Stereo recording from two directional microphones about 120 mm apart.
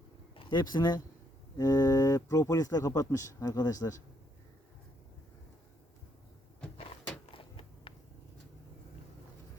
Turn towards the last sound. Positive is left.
turn(degrees=50)  # may be behind; listen again after turning